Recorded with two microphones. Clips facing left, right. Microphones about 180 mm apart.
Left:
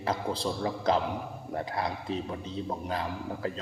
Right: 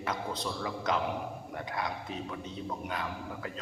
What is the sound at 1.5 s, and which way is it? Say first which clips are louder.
A man's voice: left 5 dB; 30° left (ahead or behind).